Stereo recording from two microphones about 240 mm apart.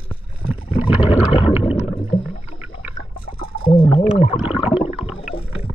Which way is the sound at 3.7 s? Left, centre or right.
Left.